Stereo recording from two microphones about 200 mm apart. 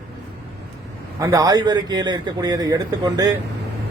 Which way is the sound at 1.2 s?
15° right (ahead or behind).